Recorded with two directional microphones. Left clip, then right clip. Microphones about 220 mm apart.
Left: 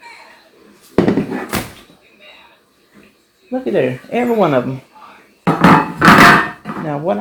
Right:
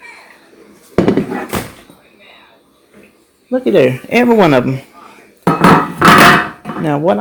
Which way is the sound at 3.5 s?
50° right (ahead or behind).